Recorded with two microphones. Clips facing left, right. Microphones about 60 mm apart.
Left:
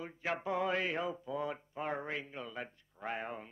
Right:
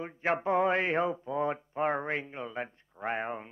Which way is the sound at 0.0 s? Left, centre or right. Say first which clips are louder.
Right 7 dB; right.